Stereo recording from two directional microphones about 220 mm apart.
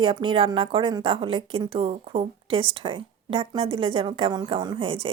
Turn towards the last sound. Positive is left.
turn(degrees=-25)  # may be behind; listen again after turning